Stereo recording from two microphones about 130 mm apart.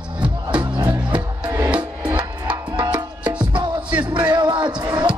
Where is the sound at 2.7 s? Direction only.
35° right (ahead or behind).